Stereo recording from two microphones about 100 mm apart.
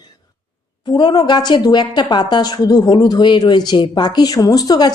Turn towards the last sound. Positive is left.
turn(degrees=40)  # may be behind; listen again after turning